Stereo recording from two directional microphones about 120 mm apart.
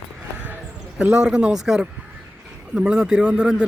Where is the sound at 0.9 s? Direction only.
5° right (ahead or behind).